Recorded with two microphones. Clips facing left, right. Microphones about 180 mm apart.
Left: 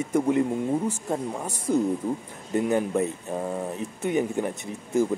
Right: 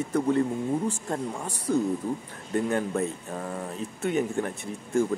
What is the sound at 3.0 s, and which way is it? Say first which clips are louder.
Speech: left 3 dB; 15° left (ahead or behind).